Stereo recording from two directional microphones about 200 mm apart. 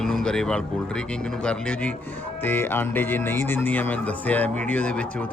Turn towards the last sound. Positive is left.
turn(degrees=5)  # may be behind; listen again after turning